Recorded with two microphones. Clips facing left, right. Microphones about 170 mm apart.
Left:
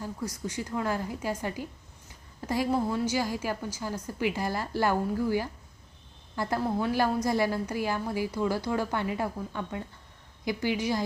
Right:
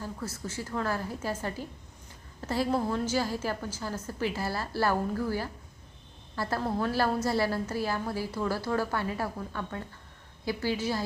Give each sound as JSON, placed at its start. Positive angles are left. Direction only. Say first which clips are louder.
{"t": 0.0, "sound": "a woman's voice", "louder": "left 2 dB", "side_deg": 15}